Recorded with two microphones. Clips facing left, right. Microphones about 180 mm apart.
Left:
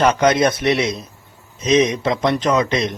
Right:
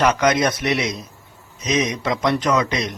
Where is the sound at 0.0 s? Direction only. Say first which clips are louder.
Left 3 dB; 30° left (ahead or behind).